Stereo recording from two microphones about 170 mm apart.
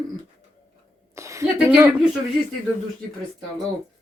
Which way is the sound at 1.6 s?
10° right (ahead or behind).